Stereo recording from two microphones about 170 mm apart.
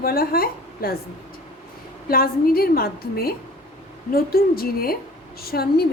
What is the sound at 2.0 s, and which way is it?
A woman's voice, 60° left (ahead or behind).